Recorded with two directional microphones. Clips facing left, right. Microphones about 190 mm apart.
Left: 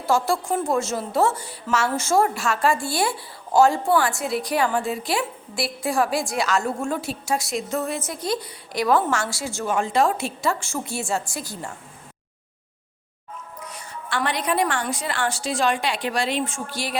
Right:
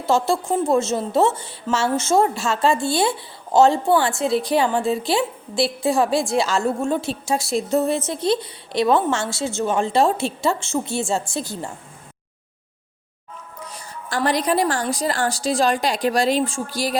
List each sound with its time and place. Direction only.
0.0 s a woman's voice: 20° right (ahead or behind)
13.7 s a woman's voice: 35° right (ahead or behind)